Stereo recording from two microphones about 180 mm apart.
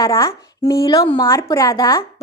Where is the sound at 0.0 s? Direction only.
15° left (ahead or behind).